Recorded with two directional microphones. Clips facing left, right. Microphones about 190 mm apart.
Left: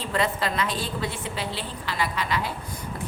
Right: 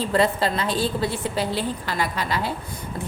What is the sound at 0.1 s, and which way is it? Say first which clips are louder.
A woman's voice: right 3 dB; 35° right (ahead or behind).